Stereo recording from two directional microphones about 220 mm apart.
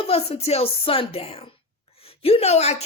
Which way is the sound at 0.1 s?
30° left (ahead or behind).